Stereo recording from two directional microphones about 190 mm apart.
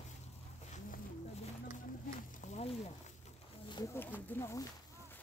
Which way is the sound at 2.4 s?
35° left (ahead or behind).